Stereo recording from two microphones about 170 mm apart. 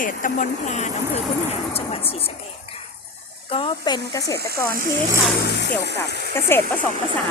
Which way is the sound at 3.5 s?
30° left (ahead or behind).